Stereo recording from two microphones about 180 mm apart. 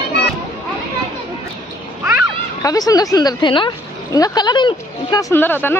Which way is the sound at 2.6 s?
20° left (ahead or behind).